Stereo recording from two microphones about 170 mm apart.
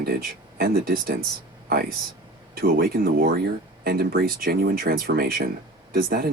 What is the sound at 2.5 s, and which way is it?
Speech, 60° right (ahead or behind).